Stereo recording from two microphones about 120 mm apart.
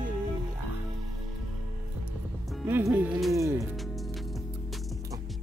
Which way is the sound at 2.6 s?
20° right (ahead or behind).